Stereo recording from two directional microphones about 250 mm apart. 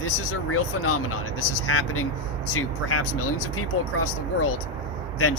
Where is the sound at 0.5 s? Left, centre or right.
Left.